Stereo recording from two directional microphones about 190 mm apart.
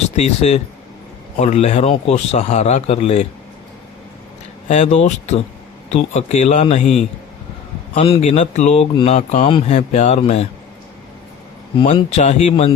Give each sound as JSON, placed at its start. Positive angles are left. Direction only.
{"t": 0.2, "sound": "a man's voice", "side_deg": 35}
{"t": 4.7, "sound": "a man's voice", "side_deg": 35}
{"t": 6.8, "sound": "a man's voice", "side_deg": 0}
{"t": 7.9, "sound": "a man's voice", "side_deg": 30}
{"t": 11.8, "sound": "a man's voice", "side_deg": 30}